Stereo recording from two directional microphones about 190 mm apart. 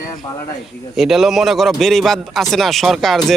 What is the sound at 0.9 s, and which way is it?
Speech, centre (ahead or behind).